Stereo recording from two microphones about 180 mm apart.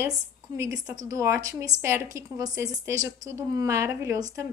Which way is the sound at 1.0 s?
15° right (ahead or behind).